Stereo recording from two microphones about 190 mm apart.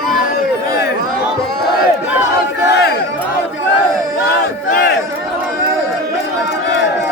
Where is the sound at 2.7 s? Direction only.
60° left (ahead or behind).